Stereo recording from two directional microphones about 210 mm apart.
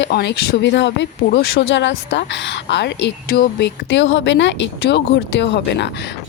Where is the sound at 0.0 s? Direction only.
50° left (ahead or behind).